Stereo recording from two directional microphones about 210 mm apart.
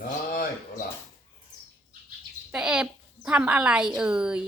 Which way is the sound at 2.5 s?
5° right (ahead or behind).